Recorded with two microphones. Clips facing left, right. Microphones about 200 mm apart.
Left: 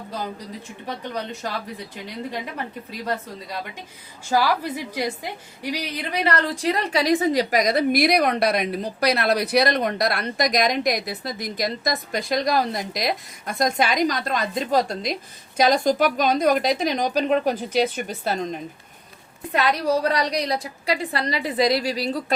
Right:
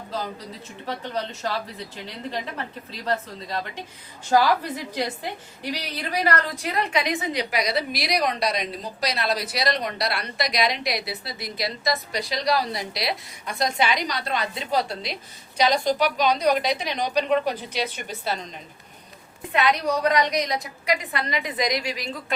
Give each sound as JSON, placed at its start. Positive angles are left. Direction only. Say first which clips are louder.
{"t": 2.9, "sound": "a woman's voice", "louder": "right 2 dB", "side_deg": 10}
{"t": 4.6, "sound": "a woman's voice", "louder": "left 2 dB", "side_deg": 10}
{"t": 6.2, "sound": "a woman's voice", "louder": "left 5 dB", "side_deg": 30}
{"t": 19.5, "sound": "a woman's voice", "louder": "left 2 dB", "side_deg": 35}